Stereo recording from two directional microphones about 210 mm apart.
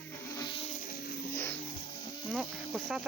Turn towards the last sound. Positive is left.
turn(degrees=0)  # may be behind; listen again after turning